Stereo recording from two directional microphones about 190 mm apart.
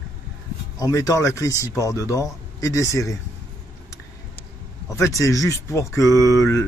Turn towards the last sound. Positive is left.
turn(degrees=15)  # may be behind; listen again after turning